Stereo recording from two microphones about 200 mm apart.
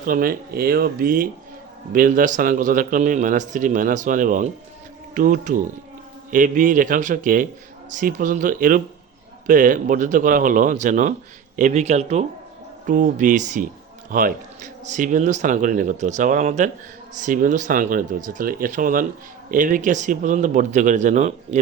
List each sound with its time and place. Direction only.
0.0 s speech: 45° right (ahead or behind)